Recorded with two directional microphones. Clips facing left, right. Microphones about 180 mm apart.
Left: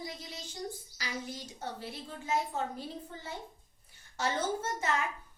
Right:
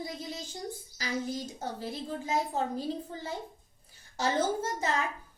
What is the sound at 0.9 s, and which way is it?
A woman's voice, 40° right (ahead or behind).